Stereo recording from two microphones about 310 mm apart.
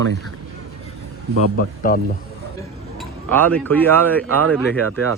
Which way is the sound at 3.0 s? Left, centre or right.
Centre.